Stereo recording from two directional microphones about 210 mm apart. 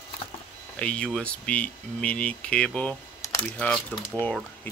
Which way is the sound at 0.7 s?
5° left (ahead or behind).